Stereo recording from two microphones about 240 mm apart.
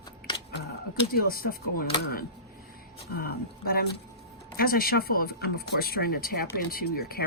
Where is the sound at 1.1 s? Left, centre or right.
Left.